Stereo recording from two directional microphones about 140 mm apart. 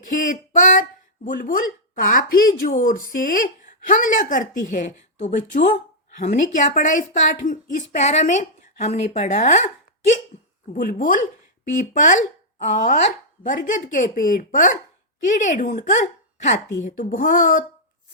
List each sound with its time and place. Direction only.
0.0 s speech: 75° left (ahead or behind)
2.0 s speech: 85° left; by 9.6 s 55° left (ahead or behind)
10.3 s hiccup: 55° left (ahead or behind)
10.8 s a woman's voice: 75° left (ahead or behind)